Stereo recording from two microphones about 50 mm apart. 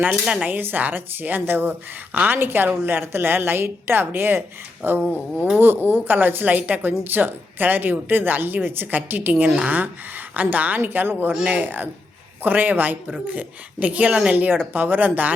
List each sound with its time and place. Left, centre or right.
0.4 s a woman's voice: right
2.4 s a woman's voice: right
5.0 s a sound: left
5.5 s a woman's voice: right
10.8 s a woman's voice: right